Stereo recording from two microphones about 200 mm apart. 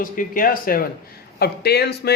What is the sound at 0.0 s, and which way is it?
A man's voice, 45° left (ahead or behind).